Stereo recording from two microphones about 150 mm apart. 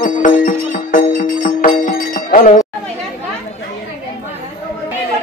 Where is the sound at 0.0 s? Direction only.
60° left (ahead or behind).